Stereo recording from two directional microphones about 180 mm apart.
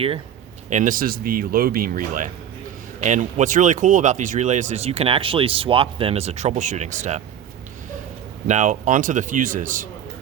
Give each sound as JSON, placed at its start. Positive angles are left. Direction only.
{"t": 0.7, "sound": "speech", "side_deg": -45}
{"t": 8.4, "sound": "speech", "side_deg": -40}